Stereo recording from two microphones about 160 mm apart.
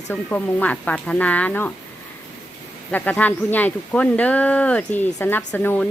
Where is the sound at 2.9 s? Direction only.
10° left (ahead or behind).